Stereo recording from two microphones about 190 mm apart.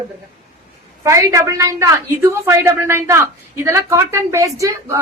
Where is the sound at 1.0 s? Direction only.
15° right (ahead or behind).